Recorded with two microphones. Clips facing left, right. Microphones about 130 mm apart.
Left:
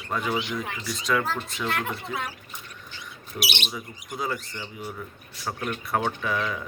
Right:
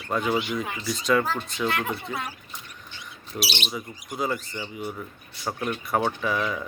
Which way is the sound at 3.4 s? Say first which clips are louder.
Right 1 dB; 20° left (ahead or behind).